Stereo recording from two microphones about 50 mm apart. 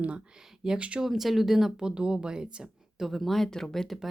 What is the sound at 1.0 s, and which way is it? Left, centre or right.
Speech, centre.